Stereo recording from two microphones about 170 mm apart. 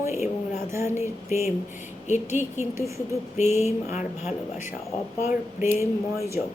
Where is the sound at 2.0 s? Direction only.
45° left (ahead or behind).